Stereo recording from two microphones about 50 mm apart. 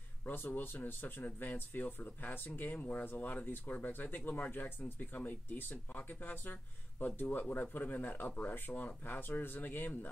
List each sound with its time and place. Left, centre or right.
0.3 s speech: left